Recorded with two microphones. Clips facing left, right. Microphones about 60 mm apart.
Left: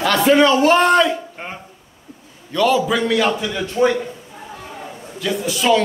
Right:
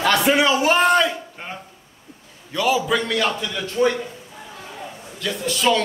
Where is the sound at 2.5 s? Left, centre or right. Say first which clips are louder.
Left 3 dB; centre.